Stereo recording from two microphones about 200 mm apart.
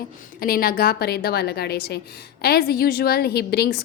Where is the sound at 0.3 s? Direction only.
45° left (ahead or behind).